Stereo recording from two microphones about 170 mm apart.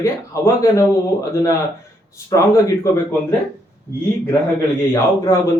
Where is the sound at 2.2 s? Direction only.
15° left (ahead or behind).